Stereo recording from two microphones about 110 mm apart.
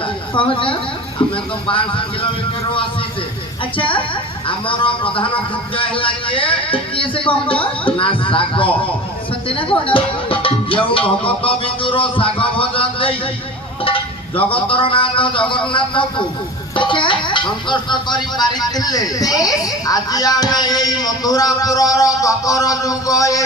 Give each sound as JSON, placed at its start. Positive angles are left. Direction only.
{"t": 0.3, "sound": "a woman's voice", "side_deg": 50}
{"t": 3.8, "sound": "a woman's voice", "side_deg": 50}